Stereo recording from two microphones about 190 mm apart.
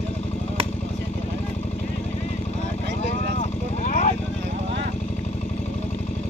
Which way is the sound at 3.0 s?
35° left (ahead or behind).